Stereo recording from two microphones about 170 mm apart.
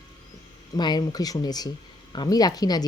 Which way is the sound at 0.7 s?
25° left (ahead or behind).